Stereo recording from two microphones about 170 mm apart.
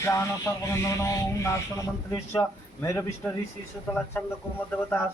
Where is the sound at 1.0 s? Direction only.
20° left (ahead or behind).